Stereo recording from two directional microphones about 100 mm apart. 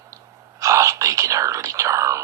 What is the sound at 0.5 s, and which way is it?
Whispering, 35° right (ahead or behind).